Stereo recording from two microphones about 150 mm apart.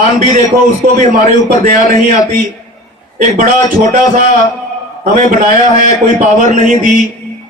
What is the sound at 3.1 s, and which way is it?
Speech, 60° right (ahead or behind).